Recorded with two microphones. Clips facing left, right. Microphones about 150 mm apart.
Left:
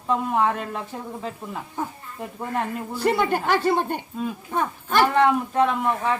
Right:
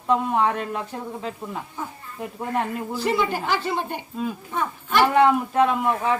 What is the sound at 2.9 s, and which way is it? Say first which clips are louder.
A woman's voice: left 2 dB; 55° left (ahead or behind).